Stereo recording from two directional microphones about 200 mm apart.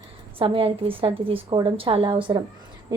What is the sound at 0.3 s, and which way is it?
A woman's voice, 25° right (ahead or behind).